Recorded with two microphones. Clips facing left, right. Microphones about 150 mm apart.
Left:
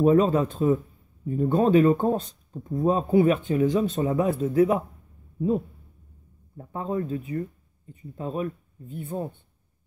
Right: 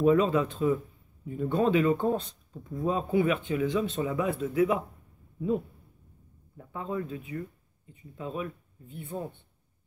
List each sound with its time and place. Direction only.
0.0 s speech: 40° left (ahead or behind)
6.5 s speech: 35° left (ahead or behind)